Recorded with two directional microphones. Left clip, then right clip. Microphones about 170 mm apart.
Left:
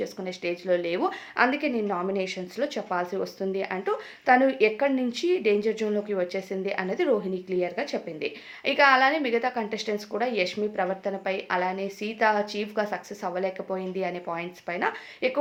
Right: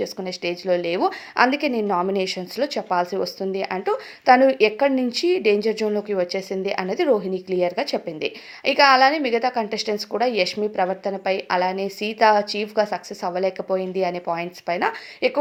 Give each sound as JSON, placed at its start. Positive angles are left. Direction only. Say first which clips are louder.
{"t": 0.0, "sound": "a woman's voice", "louder": "right 5 dB", "side_deg": -35}